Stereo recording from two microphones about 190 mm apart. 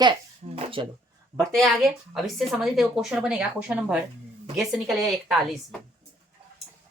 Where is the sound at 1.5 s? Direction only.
Centre (ahead or behind).